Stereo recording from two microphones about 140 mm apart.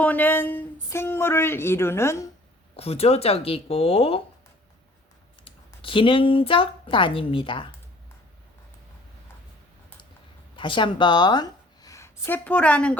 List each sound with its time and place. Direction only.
0.0 s speech: 10° left (ahead or behind)
2.7 s speech: 45° left (ahead or behind)
5.5 s a woman's voice: 40° left (ahead or behind)
10.6 s a woman's voice: 35° left (ahead or behind); by 13.0 s 10° left (ahead or behind)